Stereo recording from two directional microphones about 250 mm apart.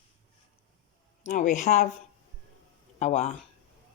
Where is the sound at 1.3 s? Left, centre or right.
Left.